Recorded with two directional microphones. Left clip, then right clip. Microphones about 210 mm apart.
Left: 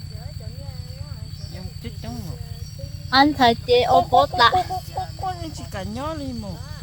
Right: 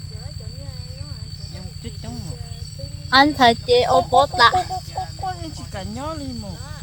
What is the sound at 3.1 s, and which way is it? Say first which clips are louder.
Speech: right 2 dB; 10° right (ahead or behind).